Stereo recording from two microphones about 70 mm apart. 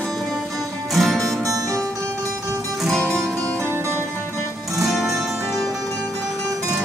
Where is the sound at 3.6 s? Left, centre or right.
Right.